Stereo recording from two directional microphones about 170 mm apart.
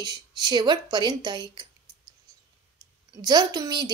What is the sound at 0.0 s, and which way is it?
A woman's voice, 25° right (ahead or behind).